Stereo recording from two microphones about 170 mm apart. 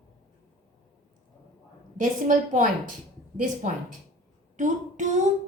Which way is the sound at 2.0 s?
50° right (ahead or behind).